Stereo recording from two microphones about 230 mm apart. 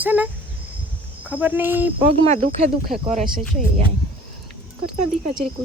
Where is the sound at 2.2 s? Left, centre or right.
Right.